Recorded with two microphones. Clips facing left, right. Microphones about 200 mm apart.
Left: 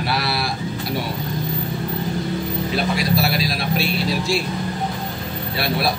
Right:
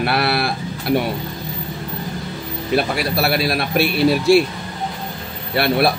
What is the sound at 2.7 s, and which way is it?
Speech, 60° right (ahead or behind).